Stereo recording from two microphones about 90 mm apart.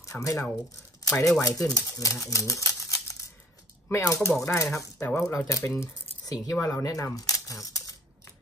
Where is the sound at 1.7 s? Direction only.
40° left (ahead or behind).